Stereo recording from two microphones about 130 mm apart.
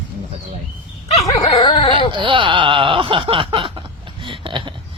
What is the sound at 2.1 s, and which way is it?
Speech, 40° right (ahead or behind).